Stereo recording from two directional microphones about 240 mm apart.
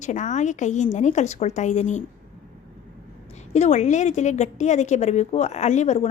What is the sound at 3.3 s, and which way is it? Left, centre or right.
A woman's voice, left.